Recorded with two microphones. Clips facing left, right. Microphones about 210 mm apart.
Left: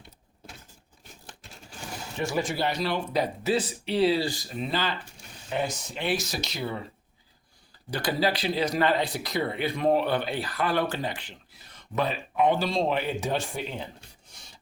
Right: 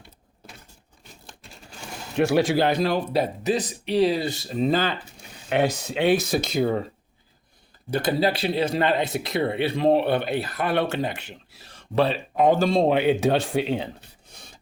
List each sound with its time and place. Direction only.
2.1 s a man's voice: 65° right (ahead or behind)
3.1 s speech: 20° right (ahead or behind); by 4.9 s 50° right (ahead or behind)
5.1 s speech: 65° right (ahead or behind); by 6.8 s 45° right (ahead or behind)
7.9 s speech: 25° right (ahead or behind); by 13.8 s 70° right (ahead or behind)
14.3 s filing: 55° right (ahead or behind)